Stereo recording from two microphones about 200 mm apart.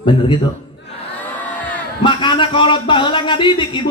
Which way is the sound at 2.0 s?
25° left (ahead or behind).